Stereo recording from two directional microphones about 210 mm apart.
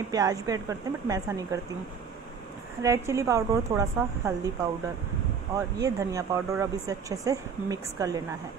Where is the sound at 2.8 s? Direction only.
15° right (ahead or behind).